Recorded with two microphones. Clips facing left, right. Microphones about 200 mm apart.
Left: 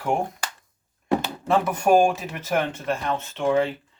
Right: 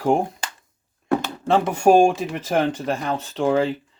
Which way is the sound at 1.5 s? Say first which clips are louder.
Right 3 dB; 30° right (ahead or behind).